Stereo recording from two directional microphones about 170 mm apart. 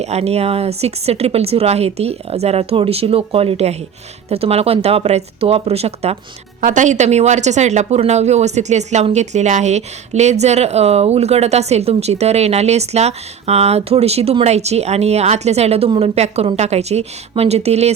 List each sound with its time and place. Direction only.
0.0 s speech: 40° right (ahead or behind)
6.6 s speech: 50° right (ahead or behind)